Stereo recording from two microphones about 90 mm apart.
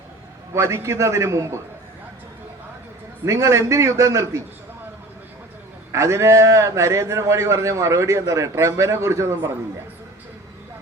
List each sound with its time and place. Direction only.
0.5 s a man's voice: 30° right (ahead or behind)
3.2 s a man's voice: 35° right (ahead or behind)
5.9 s a man's voice: 35° right (ahead or behind)